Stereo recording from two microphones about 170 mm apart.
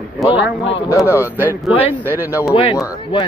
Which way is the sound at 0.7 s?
20° left (ahead or behind).